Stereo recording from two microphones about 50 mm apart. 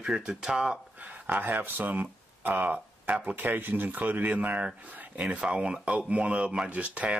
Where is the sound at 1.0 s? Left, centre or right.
Right.